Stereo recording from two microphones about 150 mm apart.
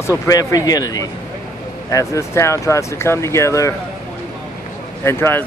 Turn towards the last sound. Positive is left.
turn(degrees=15)  # may be behind; listen again after turning